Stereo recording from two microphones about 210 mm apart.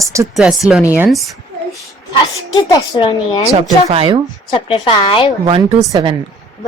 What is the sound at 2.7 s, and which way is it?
Speech, 20° left (ahead or behind).